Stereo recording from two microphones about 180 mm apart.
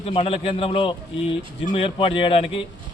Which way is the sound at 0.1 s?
30° left (ahead or behind).